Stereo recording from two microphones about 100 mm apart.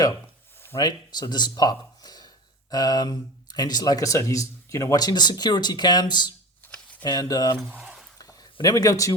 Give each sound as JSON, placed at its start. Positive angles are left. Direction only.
{"t": 0.8, "sound": "speech", "side_deg": 40}
{"t": 7.8, "sound": "a sound", "side_deg": -5}
{"t": 8.6, "sound": "speech", "side_deg": 35}